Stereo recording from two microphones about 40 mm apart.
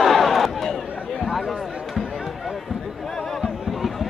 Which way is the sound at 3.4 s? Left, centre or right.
Centre.